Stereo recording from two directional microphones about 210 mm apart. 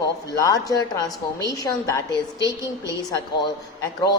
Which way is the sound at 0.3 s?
15° left (ahead or behind).